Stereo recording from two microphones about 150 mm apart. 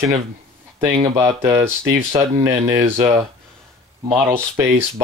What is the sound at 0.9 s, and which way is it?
Speech, 25° right (ahead or behind).